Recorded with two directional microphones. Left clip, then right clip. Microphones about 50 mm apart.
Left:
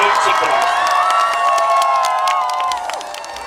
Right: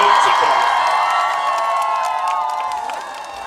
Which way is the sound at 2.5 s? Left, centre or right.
Left.